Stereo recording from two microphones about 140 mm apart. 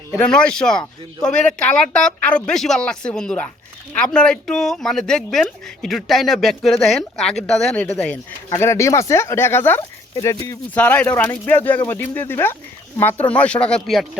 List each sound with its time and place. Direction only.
0.2 s speech: 5° left (ahead or behind)
8.4 s speech: 20° left (ahead or behind); by 14.1 s centre (ahead or behind)